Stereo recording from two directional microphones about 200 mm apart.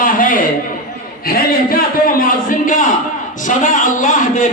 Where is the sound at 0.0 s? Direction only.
45° left (ahead or behind).